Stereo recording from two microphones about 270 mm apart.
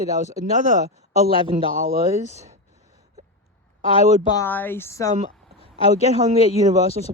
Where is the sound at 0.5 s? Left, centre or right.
Right.